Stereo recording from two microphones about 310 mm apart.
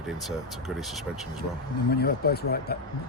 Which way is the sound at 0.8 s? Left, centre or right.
Centre.